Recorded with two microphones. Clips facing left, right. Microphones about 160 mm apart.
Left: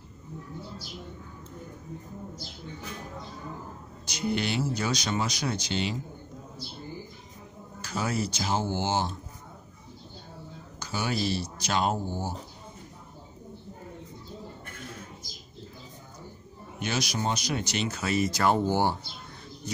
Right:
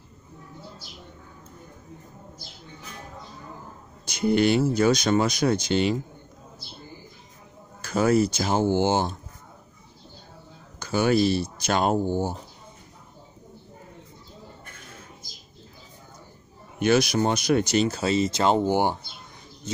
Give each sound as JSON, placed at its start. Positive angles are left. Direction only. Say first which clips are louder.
{"t": 4.0, "sound": "speech", "louder": "right 8 dB", "side_deg": -50}
{"t": 7.8, "sound": "speech", "louder": "right 10 dB", "side_deg": -50}
{"t": 10.8, "sound": "speech", "louder": "right 9 dB", "side_deg": -55}
{"t": 16.8, "sound": "speech", "louder": "right 9 dB", "side_deg": -55}